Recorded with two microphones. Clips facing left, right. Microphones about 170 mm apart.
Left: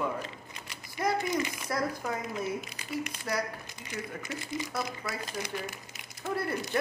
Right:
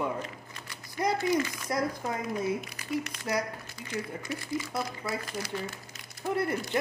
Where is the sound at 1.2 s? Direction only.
15° left (ahead or behind).